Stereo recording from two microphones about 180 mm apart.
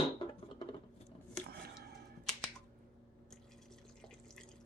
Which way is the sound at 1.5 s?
60° right (ahead or behind).